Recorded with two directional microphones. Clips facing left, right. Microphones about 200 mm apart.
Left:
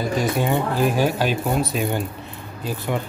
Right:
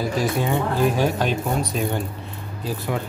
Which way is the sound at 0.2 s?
Centre (ahead or behind).